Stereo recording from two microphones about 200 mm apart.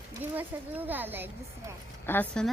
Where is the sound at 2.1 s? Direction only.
10° left (ahead or behind).